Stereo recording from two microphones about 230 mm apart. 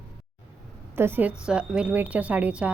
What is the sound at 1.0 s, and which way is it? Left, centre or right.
A woman's voice, centre.